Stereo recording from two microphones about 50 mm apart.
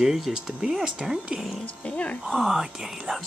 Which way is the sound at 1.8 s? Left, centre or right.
Left.